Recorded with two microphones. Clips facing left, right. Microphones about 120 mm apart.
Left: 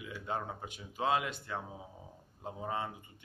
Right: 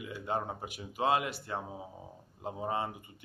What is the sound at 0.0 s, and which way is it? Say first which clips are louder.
Speech: right 3 dB; 5° right (ahead or behind).